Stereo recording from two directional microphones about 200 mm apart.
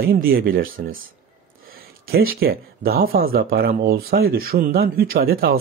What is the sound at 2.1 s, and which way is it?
Speech, 50° right (ahead or behind).